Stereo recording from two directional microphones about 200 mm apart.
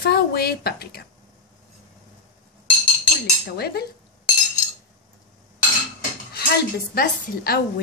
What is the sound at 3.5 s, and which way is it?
Speech, 50° left (ahead or behind).